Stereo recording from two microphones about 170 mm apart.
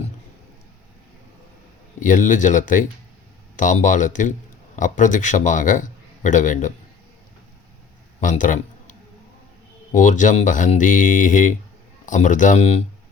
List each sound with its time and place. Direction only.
2.0 s a man's voice: 50° left (ahead or behind)
8.2 s a man's voice: 50° left (ahead or behind)